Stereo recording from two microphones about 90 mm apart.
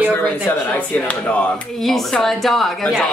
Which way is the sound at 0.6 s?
15° left (ahead or behind).